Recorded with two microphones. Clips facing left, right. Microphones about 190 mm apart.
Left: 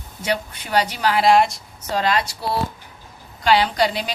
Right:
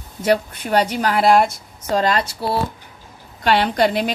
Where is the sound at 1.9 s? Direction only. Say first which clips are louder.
Right 3 dB; 40° right (ahead or behind).